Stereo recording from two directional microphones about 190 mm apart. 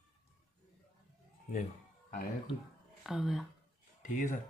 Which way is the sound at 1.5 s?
45° left (ahead or behind).